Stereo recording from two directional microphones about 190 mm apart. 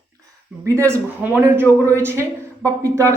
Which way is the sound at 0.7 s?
15° right (ahead or behind).